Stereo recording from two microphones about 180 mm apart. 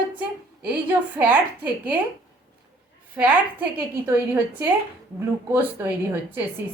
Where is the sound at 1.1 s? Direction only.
10° right (ahead or behind).